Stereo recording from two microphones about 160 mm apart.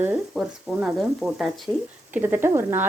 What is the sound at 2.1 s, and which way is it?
Speech, 15° right (ahead or behind).